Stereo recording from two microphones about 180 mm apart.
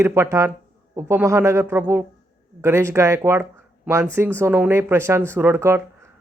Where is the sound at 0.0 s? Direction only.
15° right (ahead or behind).